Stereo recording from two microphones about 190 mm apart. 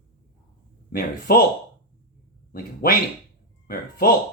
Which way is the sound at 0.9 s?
50° left (ahead or behind).